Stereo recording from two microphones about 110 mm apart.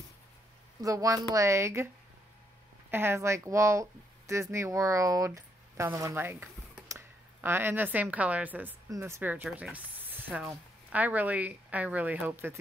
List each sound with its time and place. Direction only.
0.7 s speech: 30° right (ahead or behind)
2.9 s speech: 20° right (ahead or behind)
5.9 s stir: 25° right (ahead or behind)
7.4 s speech: 20° right (ahead or behind)
8.8 s speech: 25° right (ahead or behind)